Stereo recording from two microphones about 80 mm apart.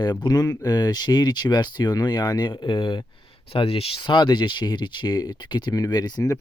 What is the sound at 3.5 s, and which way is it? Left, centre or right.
Speech, left.